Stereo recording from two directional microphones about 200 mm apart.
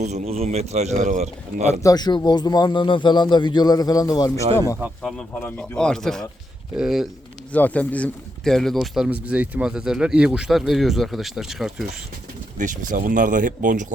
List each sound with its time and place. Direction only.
0.0 s a man's voice: 35° right (ahead or behind)
1.8 s speech: 20° left (ahead or behind); by 11.9 s centre (ahead or behind)
12.5 s a man's voice: 40° right (ahead or behind)